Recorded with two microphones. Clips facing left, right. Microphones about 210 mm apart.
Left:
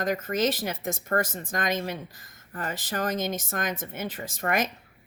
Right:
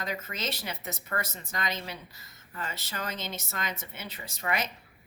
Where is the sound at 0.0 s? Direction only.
50° left (ahead or behind).